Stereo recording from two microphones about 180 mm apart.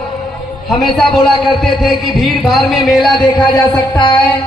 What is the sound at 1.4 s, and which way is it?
A man's voice, centre (ahead or behind).